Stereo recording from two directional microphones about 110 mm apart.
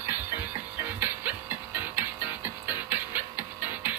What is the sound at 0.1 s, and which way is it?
Music, 15° right (ahead or behind).